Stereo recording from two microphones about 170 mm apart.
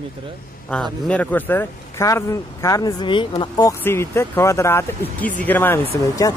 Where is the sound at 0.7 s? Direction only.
5° left (ahead or behind).